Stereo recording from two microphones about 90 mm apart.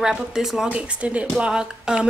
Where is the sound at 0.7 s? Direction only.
15° right (ahead or behind).